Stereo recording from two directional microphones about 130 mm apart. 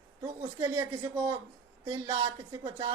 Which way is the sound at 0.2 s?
35° right (ahead or behind).